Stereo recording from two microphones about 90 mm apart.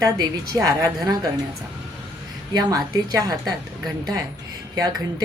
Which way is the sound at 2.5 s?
45° right (ahead or behind).